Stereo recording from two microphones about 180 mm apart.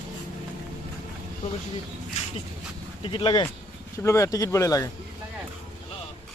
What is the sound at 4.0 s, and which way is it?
Speech, 15° left (ahead or behind).